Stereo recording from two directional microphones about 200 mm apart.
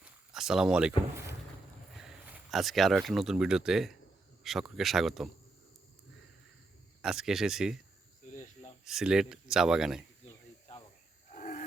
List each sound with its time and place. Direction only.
0.0 s speech: centre (ahead or behind)
7.0 s speech: 5° right (ahead or behind)
8.8 s speech: centre (ahead or behind)
11.3 s wild animals: 40° left (ahead or behind)